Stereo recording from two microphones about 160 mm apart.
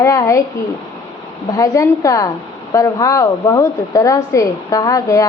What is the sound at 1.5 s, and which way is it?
A woman's voice, 20° left (ahead or behind).